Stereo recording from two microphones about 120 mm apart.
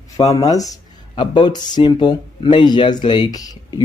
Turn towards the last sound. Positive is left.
turn(degrees=35)  # may be behind; listen again after turning